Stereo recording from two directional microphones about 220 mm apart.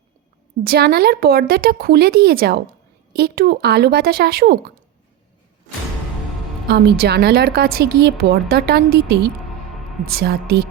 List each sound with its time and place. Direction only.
0.6 s a woman's voice: 45° right (ahead or behind)
6.7 s a woman's voice: 50° right (ahead or behind)